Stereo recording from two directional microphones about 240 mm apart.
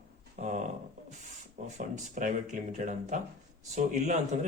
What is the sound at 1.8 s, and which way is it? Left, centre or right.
Speech, right.